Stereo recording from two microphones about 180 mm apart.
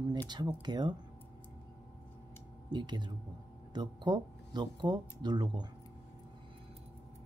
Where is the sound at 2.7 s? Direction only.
25° right (ahead or behind).